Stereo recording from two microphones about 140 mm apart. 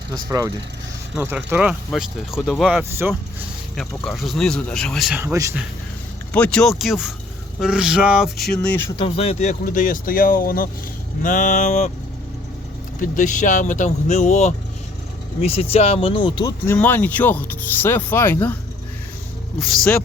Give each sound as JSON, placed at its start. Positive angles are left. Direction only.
{"t": 0.3, "sound": "a man's voice", "side_deg": -25}
{"t": 5.2, "sound": "a man's voice", "side_deg": -20}
{"t": 6.3, "sound": "speech", "side_deg": 10}
{"t": 9.0, "sound": "speech", "side_deg": 45}
{"t": 11.2, "sound": "speech", "side_deg": 70}
{"t": 13.0, "sound": "speech", "side_deg": 65}
{"t": 16.6, "sound": "speech", "side_deg": 15}
{"t": 19.5, "sound": "speech", "side_deg": 5}